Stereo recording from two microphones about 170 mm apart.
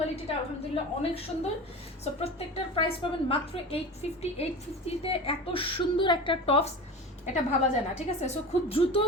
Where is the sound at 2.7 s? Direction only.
30° left (ahead or behind).